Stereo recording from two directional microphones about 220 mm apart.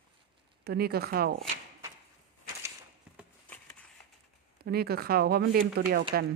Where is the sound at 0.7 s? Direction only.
45° right (ahead or behind).